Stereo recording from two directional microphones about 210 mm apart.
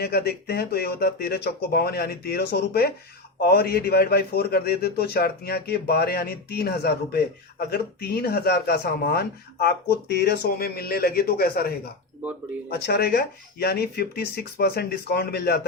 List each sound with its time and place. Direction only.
0.0 s a man's voice: 50° left (ahead or behind)